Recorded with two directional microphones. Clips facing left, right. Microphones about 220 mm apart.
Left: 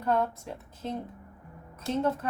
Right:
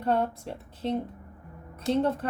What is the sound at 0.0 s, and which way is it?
Speech, 30° right (ahead or behind).